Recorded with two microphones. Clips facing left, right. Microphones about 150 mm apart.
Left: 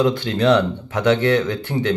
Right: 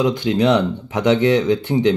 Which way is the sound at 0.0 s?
15° right (ahead or behind).